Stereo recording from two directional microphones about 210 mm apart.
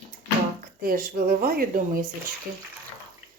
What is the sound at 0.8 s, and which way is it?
Speech, 45° right (ahead or behind).